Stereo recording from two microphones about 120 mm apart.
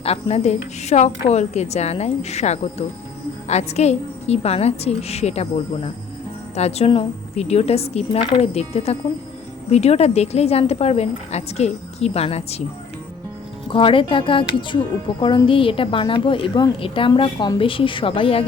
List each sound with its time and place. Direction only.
0.0 s a woman's voice: 60° left (ahead or behind)
13.7 s a woman's voice: 45° left (ahead or behind)